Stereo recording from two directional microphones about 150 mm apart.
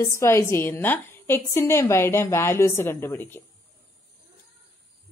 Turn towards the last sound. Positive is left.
turn(degrees=15)  # may be behind; listen again after turning